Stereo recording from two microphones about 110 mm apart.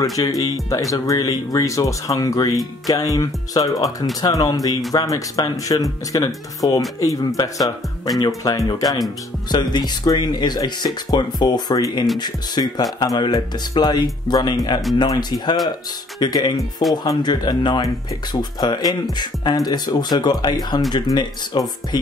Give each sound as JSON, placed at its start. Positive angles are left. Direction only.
{"t": 0.0, "sound": "speech", "side_deg": 30}